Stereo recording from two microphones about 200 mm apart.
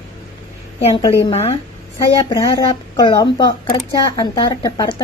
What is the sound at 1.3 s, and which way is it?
Speech, 30° left (ahead or behind).